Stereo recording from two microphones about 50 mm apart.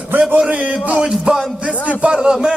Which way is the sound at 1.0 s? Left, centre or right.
Centre.